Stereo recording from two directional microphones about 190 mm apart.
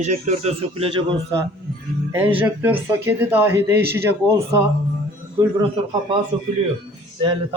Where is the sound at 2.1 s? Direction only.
10° right (ahead or behind).